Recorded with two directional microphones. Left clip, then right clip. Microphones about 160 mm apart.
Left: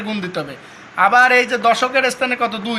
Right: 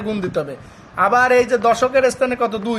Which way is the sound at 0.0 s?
70° right (ahead or behind).